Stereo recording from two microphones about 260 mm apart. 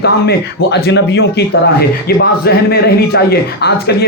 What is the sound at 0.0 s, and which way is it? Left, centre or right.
A man's voice, left.